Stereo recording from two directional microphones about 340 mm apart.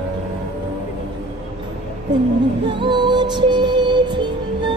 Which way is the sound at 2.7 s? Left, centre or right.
Centre.